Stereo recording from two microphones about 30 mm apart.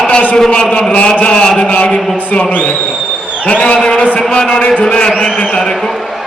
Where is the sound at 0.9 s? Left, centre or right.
Left.